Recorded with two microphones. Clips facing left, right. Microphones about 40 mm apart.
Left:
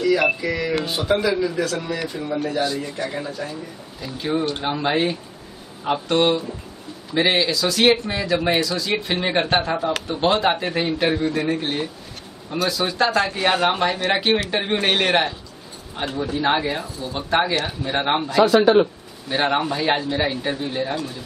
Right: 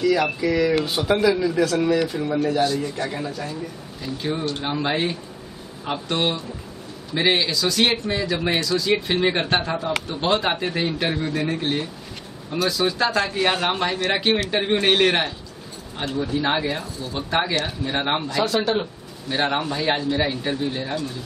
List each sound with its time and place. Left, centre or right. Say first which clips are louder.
0.0 s speech: left 1 dB; centre
18.4 s speech: left 10 dB; centre